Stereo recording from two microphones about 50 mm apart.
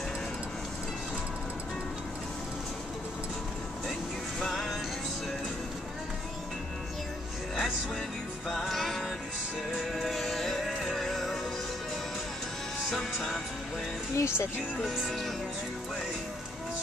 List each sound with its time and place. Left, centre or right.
4.4 s music: centre
8.5 s music: centre
12.9 s music: centre
14.1 s speech: left
15.0 s music: centre